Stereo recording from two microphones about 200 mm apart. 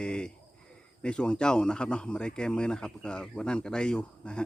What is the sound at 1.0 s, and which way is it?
Speech, 5° left (ahead or behind).